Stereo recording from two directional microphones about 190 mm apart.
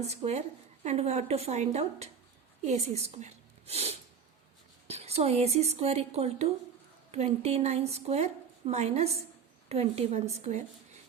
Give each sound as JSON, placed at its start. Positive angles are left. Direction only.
{"t": 0.0, "sound": "a woman's voice", "side_deg": -35}